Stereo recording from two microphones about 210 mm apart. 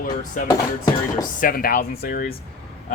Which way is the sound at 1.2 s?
40° left (ahead or behind).